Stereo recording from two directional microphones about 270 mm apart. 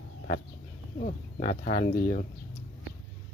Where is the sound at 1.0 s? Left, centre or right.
Left.